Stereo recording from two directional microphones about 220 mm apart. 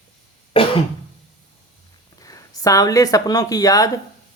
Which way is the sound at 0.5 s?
25° left (ahead or behind).